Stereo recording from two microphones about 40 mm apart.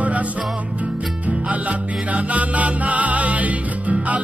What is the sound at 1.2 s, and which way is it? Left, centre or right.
Music, right.